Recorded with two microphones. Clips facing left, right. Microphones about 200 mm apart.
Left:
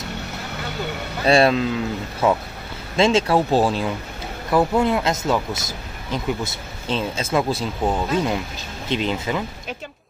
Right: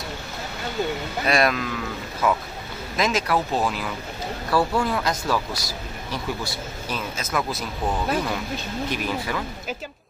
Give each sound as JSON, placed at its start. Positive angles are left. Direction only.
{"t": 1.2, "sound": "speech", "side_deg": 30}